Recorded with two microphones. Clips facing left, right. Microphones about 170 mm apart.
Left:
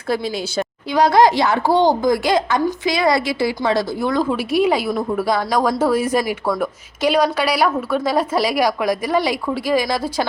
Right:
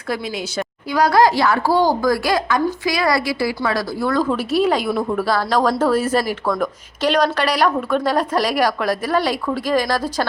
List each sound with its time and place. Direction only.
0.1 s speech: 30° left (ahead or behind); by 5.2 s 5° left (ahead or behind)
5.2 s a woman's voice: 15° left (ahead or behind)